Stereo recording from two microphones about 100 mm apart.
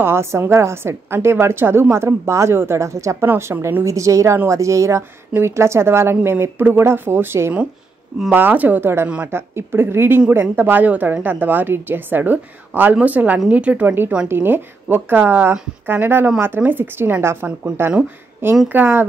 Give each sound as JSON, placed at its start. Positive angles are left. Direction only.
{"t": 0.0, "sound": "a woman's voice", "side_deg": -25}